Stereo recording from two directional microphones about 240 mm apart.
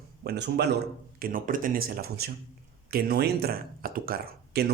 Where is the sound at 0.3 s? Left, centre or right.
Right.